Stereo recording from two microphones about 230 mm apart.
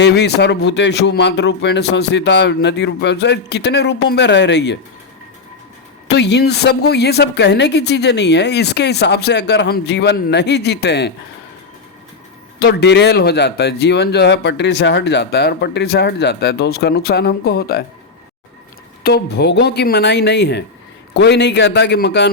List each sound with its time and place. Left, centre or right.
0.0 s speech: left
6.1 s speech: left
12.5 s speech: left
19.0 s speech: left